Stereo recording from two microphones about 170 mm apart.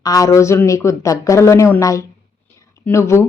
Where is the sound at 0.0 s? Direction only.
20° left (ahead or behind).